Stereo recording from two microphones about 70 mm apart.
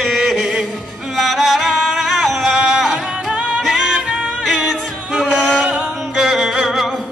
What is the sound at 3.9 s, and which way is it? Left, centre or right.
Music, centre.